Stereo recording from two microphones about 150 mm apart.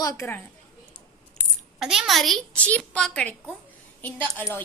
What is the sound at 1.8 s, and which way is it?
A woman's voice, 5° right (ahead or behind).